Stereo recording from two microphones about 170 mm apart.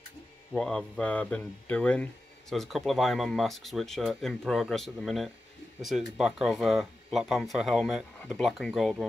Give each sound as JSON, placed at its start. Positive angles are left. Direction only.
{"t": 0.5, "sound": "speech", "side_deg": 5}